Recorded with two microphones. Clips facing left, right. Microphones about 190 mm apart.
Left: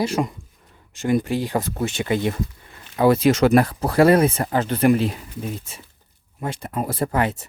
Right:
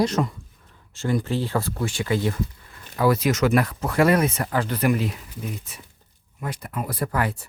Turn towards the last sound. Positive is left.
turn(degrees=20)  # may be behind; listen again after turning